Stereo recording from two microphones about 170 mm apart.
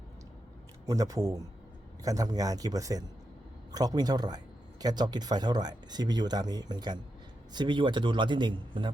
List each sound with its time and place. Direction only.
0.9 s speech: 20° right (ahead or behind)